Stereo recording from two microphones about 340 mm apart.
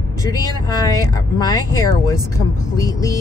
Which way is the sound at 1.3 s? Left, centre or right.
Centre.